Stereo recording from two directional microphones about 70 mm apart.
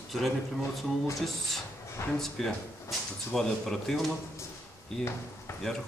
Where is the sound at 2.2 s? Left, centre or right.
Centre.